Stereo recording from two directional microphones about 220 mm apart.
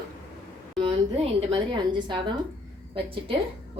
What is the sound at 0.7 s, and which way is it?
A woman's voice, 25° right (ahead or behind).